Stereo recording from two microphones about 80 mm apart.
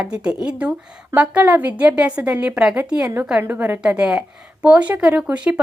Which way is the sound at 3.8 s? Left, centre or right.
Centre.